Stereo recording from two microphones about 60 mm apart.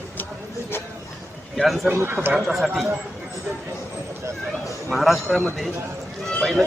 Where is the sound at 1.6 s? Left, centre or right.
Centre.